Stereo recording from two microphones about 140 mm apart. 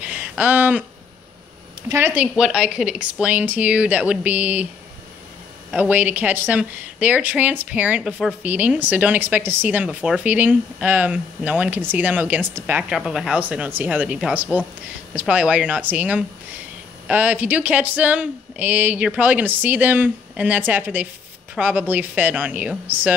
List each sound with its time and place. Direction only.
0.0 s a sound: 10° right (ahead or behind)
1.9 s speech: 15° right (ahead or behind)
2.3 s speech: 5° right (ahead or behind)
5.7 s speech: 10° right (ahead or behind)